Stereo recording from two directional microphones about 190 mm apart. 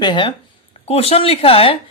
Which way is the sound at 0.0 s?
25° left (ahead or behind).